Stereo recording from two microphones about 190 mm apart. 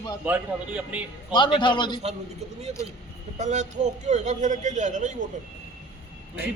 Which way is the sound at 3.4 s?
40° right (ahead or behind).